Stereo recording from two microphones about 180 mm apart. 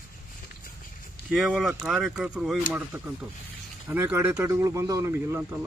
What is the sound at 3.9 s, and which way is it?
Speech, 10° right (ahead or behind).